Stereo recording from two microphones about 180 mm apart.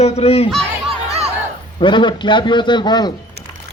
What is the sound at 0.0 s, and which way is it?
Speech, 35° left (ahead or behind).